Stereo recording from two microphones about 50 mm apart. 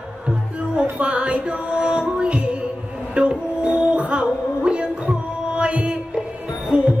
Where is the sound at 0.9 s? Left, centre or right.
Right.